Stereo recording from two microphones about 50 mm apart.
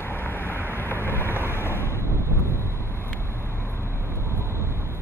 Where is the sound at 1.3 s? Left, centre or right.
Right.